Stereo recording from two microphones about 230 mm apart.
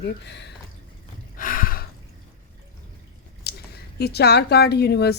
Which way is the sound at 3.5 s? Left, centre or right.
Left.